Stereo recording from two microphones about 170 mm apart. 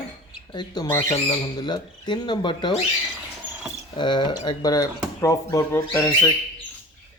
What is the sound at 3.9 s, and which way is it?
Speech, 25° left (ahead or behind).